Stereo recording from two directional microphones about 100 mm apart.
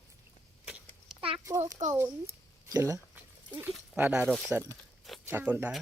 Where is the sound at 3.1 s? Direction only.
20° right (ahead or behind).